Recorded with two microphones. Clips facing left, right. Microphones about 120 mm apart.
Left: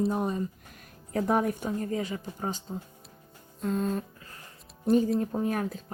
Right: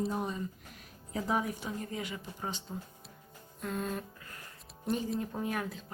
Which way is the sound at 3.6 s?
35° left (ahead or behind).